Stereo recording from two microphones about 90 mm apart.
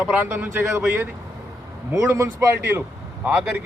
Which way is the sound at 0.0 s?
15° right (ahead or behind).